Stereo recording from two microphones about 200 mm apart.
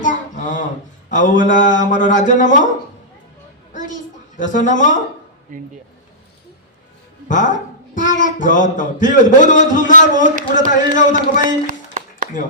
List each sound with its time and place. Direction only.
0.0 s a sound: 40° left (ahead or behind)
1.1 s speech: 40° left (ahead or behind)
3.8 s a child's voice: 40° left (ahead or behind)
5.5 s speech: 40° right (ahead or behind)
7.3 s speech: 40° left (ahead or behind)
11.6 s a sound: 40° right (ahead or behind)